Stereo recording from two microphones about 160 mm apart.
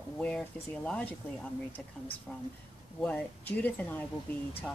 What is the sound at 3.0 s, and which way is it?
Speech, 10° left (ahead or behind).